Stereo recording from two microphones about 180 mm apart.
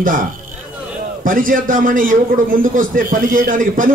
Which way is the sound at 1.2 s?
50° right (ahead or behind).